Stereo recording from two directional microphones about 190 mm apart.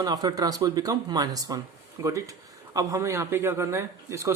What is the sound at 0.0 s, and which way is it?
Speech, 20° right (ahead or behind).